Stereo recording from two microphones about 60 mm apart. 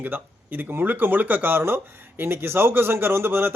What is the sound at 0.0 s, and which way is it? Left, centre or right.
A man's voice, right.